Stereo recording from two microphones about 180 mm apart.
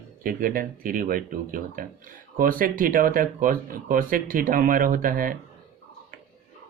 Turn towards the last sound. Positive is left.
turn(degrees=-50)  # may be behind; listen again after turning